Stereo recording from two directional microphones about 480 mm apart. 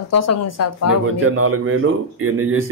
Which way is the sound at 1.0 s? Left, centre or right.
Right.